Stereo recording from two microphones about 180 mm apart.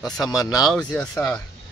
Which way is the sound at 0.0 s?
20° left (ahead or behind).